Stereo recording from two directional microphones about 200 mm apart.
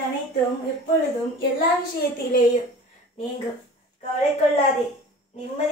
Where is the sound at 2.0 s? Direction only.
50° left (ahead or behind).